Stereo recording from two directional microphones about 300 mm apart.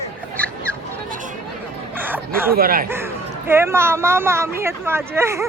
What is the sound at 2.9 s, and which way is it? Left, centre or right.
Speech, centre.